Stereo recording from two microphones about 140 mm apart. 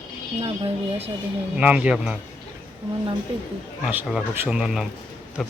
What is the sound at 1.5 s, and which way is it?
Speech, 10° right (ahead or behind).